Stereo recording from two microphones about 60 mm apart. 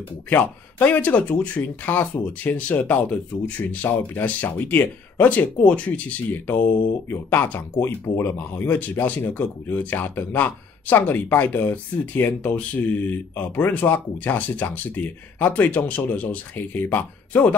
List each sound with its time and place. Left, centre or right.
0.3 s speech: left